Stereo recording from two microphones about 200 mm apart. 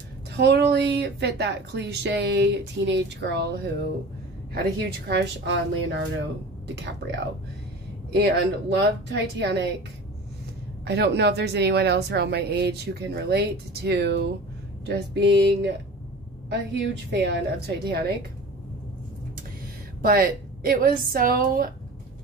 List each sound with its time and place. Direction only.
0.3 s speech: 55° right (ahead or behind)
10.9 s speech: 55° right (ahead or behind)
20.0 s a woman's voice: 45° right (ahead or behind)